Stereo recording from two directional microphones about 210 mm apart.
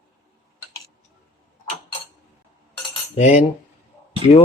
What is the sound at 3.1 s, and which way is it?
Cutlery, 30° left (ahead or behind).